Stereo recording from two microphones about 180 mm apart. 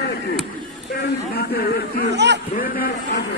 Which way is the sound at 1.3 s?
60° left (ahead or behind).